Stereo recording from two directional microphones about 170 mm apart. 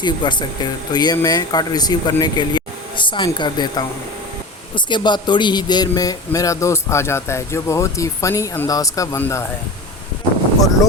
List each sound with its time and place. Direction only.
0.0 s a man's voice: 25° left (ahead or behind)